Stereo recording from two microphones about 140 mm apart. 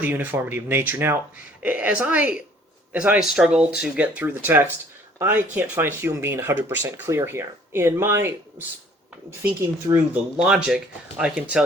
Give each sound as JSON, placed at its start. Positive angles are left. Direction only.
{"t": 0.0, "sound": "speech", "side_deg": -15}
{"t": 10.3, "sound": "speech", "side_deg": -5}